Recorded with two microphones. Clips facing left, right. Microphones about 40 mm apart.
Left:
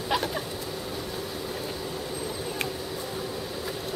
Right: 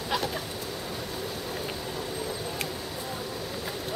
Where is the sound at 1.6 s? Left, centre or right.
Centre.